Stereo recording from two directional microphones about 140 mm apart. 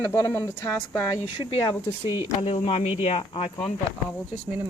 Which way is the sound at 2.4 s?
45° left (ahead or behind).